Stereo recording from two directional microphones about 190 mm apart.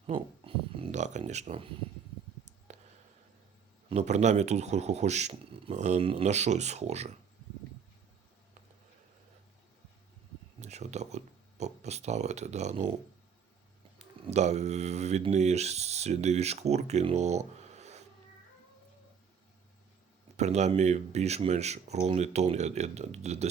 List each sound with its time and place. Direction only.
0.1 s a sound: 30° right (ahead or behind)
3.8 s speech: 35° right (ahead or behind)
10.6 s speech: 35° right (ahead or behind)
14.3 s speech: 35° right (ahead or behind)
20.3 s speech: 35° right (ahead or behind)